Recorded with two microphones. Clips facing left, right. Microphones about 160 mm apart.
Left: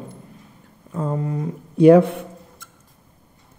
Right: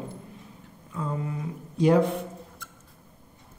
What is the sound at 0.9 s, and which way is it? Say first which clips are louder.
Speech: left 7 dB; 40° left (ahead or behind).